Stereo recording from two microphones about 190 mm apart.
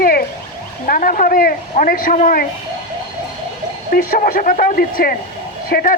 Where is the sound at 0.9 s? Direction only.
45° left (ahead or behind).